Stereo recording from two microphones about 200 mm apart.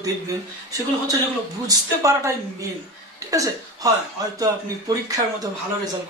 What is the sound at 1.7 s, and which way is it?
Speech, 15° right (ahead or behind).